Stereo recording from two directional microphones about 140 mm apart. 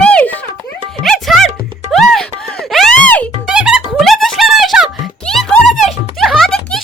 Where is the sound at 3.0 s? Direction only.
10° left (ahead or behind).